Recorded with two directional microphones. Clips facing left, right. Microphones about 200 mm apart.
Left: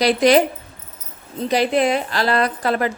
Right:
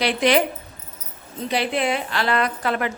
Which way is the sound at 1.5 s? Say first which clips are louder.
Left 5 dB; 40° left (ahead or behind).